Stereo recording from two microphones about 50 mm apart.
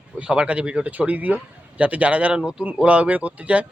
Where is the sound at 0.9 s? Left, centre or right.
Right.